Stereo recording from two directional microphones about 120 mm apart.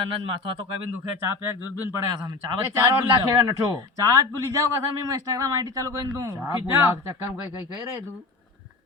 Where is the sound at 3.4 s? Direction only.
30° right (ahead or behind).